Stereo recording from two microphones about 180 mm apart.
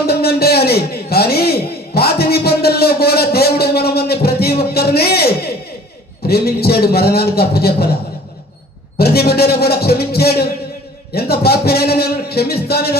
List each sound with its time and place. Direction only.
0.1 s a sound: 60° left (ahead or behind)
6.2 s music: 60° left (ahead or behind)
9.0 s music: 60° left (ahead or behind)